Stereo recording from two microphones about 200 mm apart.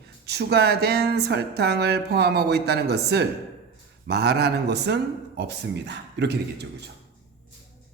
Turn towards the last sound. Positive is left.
turn(degrees=-60)  # may be behind; listen again after turning